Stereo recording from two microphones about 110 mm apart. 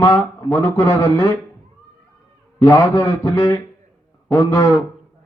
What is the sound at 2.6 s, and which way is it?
A man's voice, 30° left (ahead or behind).